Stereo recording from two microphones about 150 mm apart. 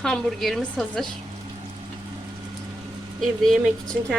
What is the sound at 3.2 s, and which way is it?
Speech, 5° left (ahead or behind).